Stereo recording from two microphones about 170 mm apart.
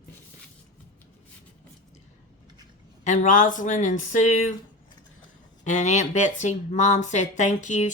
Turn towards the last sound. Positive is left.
turn(degrees=45)  # may be behind; listen again after turning